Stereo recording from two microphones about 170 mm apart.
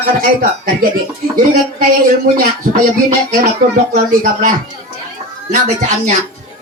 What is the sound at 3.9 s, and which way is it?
Speech, 45° right (ahead or behind).